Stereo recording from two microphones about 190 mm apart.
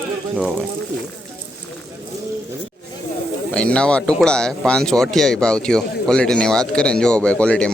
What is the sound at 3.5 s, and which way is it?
A man's voice, 5° left (ahead or behind).